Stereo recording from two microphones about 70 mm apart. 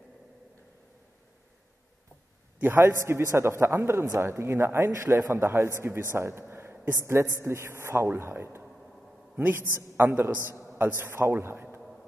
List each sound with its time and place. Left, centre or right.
2.6 s a man's voice: right
6.1 s a sound: right
6.9 s a man's voice: right